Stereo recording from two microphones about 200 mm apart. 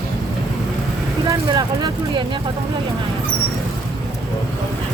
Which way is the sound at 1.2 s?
20° right (ahead or behind).